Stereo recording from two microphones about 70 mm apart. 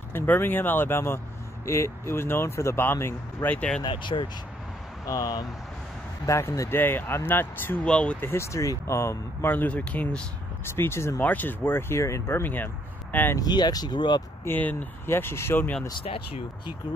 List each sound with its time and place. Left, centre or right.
0.1 s speech: left
3.4 s speech: centre
4.1 s speech: left
5.0 s speech: left
6.7 s speech: left
7.8 s speech: centre
8.2 s speech: left
9.5 s speech: left
10.6 s speech: left
11.1 s speech: left
13.4 s speech: left
14.4 s speech: left